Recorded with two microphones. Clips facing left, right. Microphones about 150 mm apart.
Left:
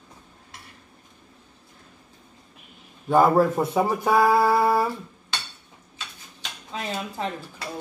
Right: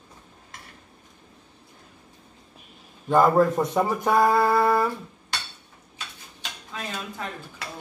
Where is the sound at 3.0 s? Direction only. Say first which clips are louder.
Even; 5° left (ahead or behind).